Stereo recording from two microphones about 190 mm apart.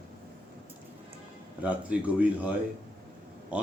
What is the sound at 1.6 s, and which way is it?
Speech, 5° right (ahead or behind).